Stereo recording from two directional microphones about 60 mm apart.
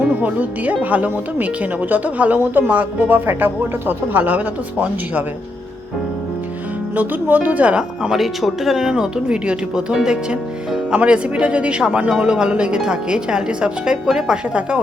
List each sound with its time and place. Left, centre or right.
0.2 s speech: right
6.9 s speech: right; by 8.2 s centre
8.2 s speech: centre